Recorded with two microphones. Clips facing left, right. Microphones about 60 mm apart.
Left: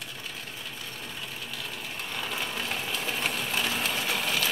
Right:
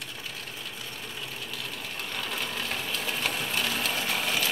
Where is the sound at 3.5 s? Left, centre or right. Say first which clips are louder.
Even; centre.